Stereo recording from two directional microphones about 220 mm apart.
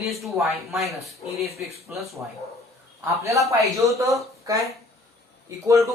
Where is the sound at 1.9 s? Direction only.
5° right (ahead or behind).